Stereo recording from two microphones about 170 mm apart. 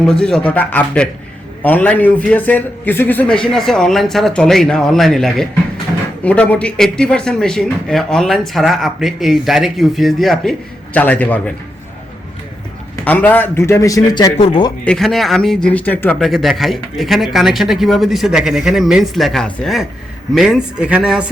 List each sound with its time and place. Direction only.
0.0 s a man's voice: 5° left (ahead or behind)
13.1 s a man's voice: 10° left (ahead or behind); by 14.7 s 30° left (ahead or behind)
14.8 s speech: centre (ahead or behind)